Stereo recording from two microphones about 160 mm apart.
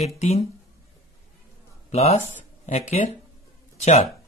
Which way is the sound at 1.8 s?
40° left (ahead or behind).